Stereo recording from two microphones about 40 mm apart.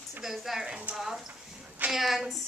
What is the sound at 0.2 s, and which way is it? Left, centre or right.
A woman's voice, centre.